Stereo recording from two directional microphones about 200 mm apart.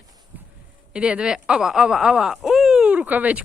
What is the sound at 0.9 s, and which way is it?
Speech, 5° right (ahead or behind).